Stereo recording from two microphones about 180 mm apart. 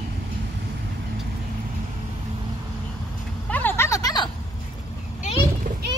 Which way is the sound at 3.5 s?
10° left (ahead or behind).